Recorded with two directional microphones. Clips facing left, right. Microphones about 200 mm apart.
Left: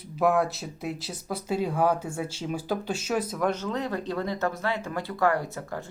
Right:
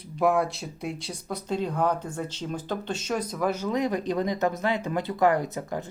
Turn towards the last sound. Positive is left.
turn(degrees=-15)  # may be behind; listen again after turning